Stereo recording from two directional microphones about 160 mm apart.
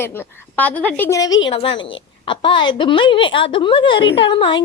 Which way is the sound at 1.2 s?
25° left (ahead or behind).